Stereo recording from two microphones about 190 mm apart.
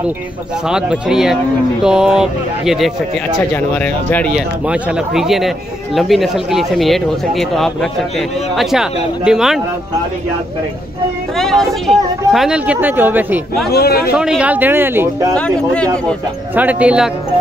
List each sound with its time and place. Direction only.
0.7 s speech: 5° right (ahead or behind)
3.5 s speech: 10° left (ahead or behind)
4.6 s speech: 5° right (ahead or behind)
11.3 s speech: centre (ahead or behind)
13.7 s a man's voice: 55° left (ahead or behind)
14.1 s speech: 5° right (ahead or behind)
15.3 s speech: 5° left (ahead or behind)
16.5 s speech: 10° right (ahead or behind)